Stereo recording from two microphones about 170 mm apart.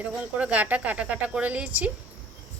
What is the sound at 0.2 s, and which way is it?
A woman's voice, 10° right (ahead or behind).